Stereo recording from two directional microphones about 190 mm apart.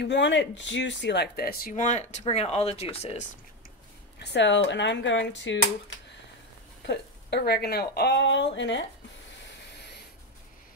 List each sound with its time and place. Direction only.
0.0 s speech: 65° left (ahead or behind); by 3.3 s 35° left (ahead or behind)
4.2 s speech: 65° left (ahead or behind)
6.9 s speech: 60° left (ahead or behind)